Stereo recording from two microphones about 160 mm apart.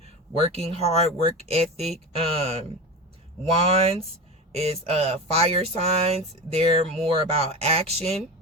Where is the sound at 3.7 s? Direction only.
35° right (ahead or behind).